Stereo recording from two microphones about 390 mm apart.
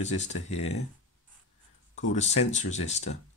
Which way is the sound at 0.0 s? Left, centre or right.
Centre.